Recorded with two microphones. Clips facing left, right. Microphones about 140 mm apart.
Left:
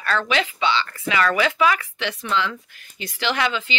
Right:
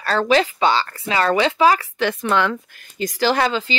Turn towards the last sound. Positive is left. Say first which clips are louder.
# right 5 dB
turn(degrees=-35)  # may be behind; listen again after turning